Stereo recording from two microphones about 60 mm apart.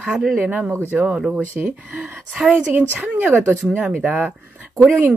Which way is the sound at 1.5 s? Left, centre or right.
Right.